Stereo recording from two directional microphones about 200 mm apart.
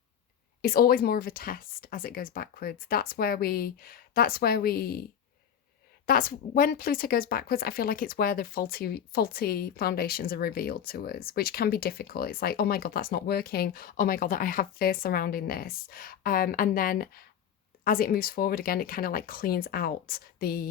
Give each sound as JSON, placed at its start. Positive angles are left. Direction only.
{"t": 0.6, "sound": "speech", "side_deg": 45}
{"t": 6.1, "sound": "speech", "side_deg": 45}